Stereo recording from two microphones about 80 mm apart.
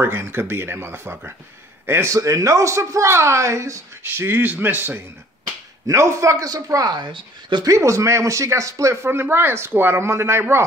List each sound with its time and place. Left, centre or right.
0.0 s speech: right
4.0 s speech: right
5.9 s speech: right
7.0 s speech: right
7.6 s speech: right